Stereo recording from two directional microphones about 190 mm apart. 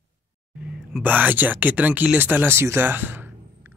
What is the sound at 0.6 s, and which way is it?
Speech, 5° right (ahead or behind).